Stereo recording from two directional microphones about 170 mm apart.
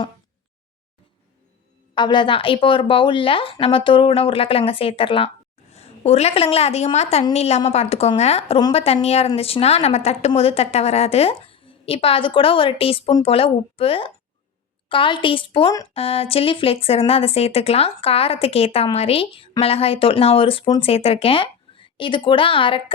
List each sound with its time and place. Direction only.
2.0 s a woman's voice: 25° left (ahead or behind)